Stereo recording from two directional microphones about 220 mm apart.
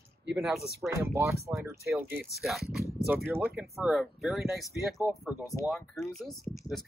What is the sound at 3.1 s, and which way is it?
Speech, 10° right (ahead or behind).